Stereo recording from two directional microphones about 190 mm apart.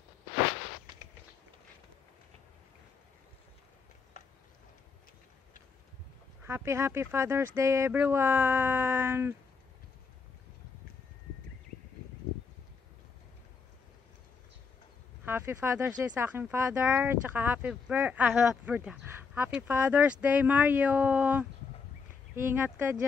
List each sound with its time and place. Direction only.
6.4 s speech: 15° right (ahead or behind)
15.2 s speech: 10° right (ahead or behind)